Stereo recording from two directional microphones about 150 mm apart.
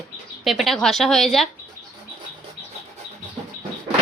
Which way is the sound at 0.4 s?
Centre (ahead or behind).